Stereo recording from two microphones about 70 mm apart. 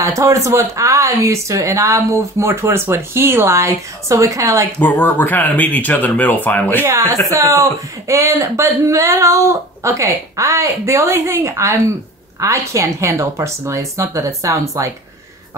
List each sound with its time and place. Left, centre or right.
0.0 s speech: right
5.0 s speech: left
6.8 s speech: right